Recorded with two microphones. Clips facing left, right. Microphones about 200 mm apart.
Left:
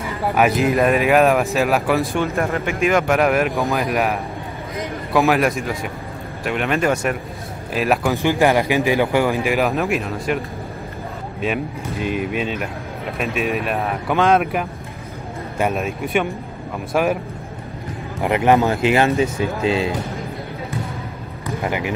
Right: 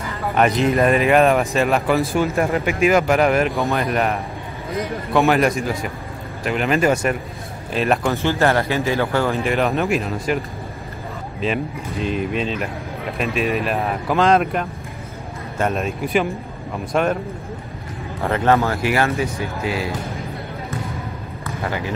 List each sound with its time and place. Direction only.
0.3 s speech: 5° left (ahead or behind)
2.4 s speech: 15° right (ahead or behind)
2.8 s speech: centre (ahead or behind)
8.2 s speech: 15° left (ahead or behind)
11.4 s speech: 5° left (ahead or behind)
18.2 s speech: 15° left (ahead or behind)
21.5 s a sound: 15° left (ahead or behind)